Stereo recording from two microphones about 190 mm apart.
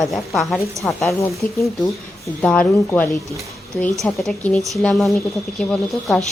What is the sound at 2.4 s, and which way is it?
A woman's voice, 5° left (ahead or behind).